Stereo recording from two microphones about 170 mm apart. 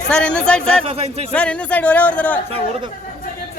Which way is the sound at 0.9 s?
35° right (ahead or behind).